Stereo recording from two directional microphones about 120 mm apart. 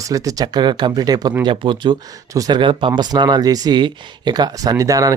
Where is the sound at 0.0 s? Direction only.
30° right (ahead or behind).